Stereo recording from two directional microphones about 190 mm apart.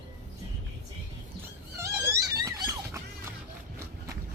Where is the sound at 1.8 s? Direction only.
15° right (ahead or behind).